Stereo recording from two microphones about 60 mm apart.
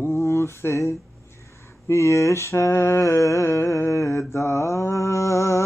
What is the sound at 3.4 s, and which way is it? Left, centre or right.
Mantra, left.